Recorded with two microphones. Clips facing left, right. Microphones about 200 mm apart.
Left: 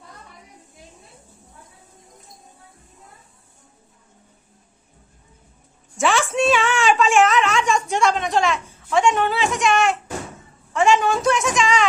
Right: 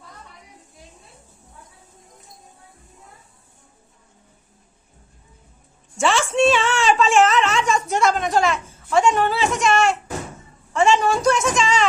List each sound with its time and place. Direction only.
6.0 s a woman's voice: centre (ahead or behind)